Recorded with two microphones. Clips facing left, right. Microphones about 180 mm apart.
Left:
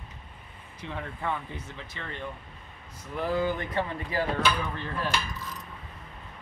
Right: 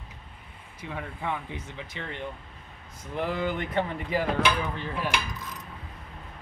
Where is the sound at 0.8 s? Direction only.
10° right (ahead or behind).